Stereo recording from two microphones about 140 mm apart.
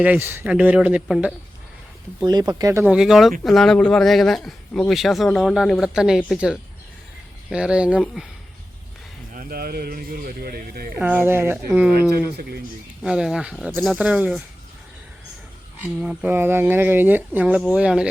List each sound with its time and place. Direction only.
0.0 s speech: 15° right (ahead or behind)
2.2 s speech: 30° right (ahead or behind)
2.8 s speech: 5° right (ahead or behind)
9.3 s speech: 90° right
10.9 s speech: 10° right (ahead or behind)
15.8 s speech: 10° right (ahead or behind)